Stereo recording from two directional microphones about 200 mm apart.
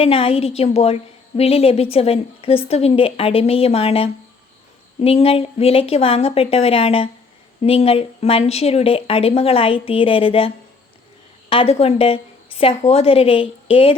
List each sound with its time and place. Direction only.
0.0 s a woman's voice: 30° left (ahead or behind)